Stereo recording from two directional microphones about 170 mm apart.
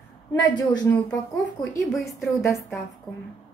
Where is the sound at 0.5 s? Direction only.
25° left (ahead or behind).